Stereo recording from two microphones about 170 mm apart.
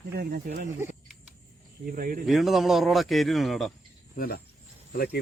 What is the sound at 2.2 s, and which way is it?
Speech, centre (ahead or behind).